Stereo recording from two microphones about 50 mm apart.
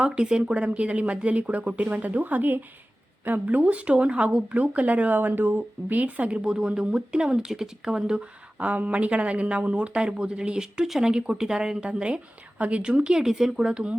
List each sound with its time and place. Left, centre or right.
0.0 s speech: centre; by 6.0 s right
6.0 s a woman's voice: right
8.5 s a woman's voice: right